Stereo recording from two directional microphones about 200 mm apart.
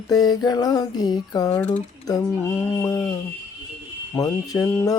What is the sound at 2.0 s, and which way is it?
Mantra, 15° left (ahead or behind).